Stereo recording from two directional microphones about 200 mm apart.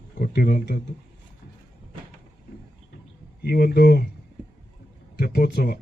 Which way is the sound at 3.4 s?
50° left (ahead or behind).